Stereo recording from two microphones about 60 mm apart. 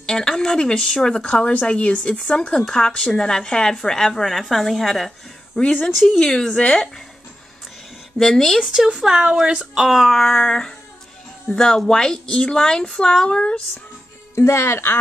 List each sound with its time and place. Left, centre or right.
0.0 s speech: centre
5.6 s speech: centre
8.2 s speech: centre
8.5 s a sound: centre
8.8 s speech: centre
9.8 s a sound: centre
11.5 s speech: centre
14.3 s speech: left